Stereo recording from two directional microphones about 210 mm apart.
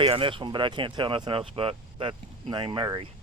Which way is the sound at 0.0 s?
25° right (ahead or behind).